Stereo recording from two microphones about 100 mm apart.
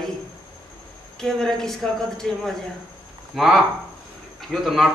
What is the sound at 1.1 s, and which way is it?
Speech, 5° left (ahead or behind).